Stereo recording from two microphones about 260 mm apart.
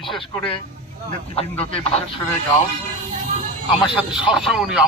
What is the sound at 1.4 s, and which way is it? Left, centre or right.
Speech, left.